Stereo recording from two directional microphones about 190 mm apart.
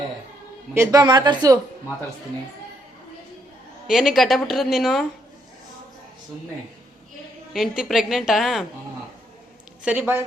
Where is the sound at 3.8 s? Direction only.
Centre (ahead or behind).